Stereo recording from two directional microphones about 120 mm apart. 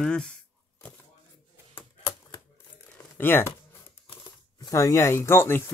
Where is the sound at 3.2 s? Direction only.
20° left (ahead or behind).